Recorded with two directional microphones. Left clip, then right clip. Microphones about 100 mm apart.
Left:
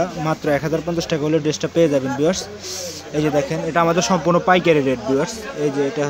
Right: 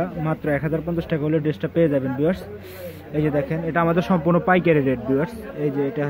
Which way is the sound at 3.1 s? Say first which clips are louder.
Left 3 dB; 30° left (ahead or behind).